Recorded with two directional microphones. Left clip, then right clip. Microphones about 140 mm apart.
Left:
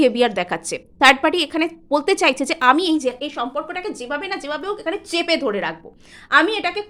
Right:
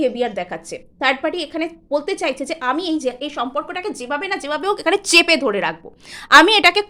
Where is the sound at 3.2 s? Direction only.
10° right (ahead or behind).